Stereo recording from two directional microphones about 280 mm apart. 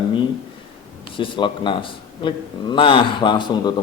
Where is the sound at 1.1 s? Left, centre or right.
Centre.